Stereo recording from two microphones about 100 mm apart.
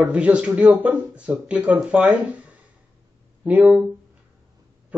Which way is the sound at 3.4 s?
15° right (ahead or behind).